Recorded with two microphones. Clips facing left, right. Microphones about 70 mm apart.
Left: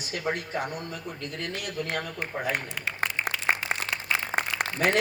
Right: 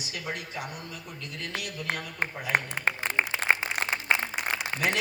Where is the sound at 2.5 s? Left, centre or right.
Right.